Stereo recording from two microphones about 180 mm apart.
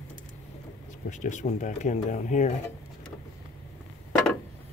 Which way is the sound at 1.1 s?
45° left (ahead or behind).